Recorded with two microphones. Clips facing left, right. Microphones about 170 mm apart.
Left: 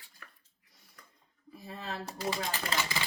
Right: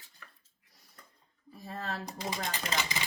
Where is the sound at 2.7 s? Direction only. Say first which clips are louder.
Even; 20° right (ahead or behind).